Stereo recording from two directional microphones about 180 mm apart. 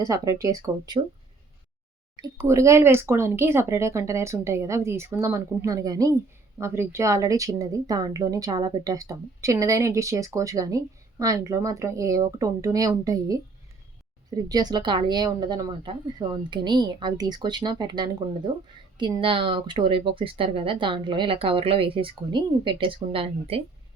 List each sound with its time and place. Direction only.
0.0 s speech: 20° right (ahead or behind)
2.1 s speech: 20° right (ahead or behind)